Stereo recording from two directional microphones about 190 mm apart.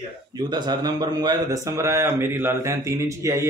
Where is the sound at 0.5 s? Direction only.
20° right (ahead or behind).